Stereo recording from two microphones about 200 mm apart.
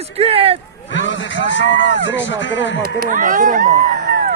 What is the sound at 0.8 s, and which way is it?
Speech, 65° left (ahead or behind).